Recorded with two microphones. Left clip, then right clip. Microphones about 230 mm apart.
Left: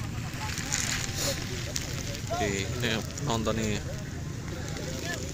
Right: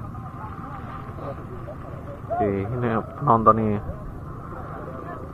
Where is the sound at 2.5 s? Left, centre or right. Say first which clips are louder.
Right 5 dB; right.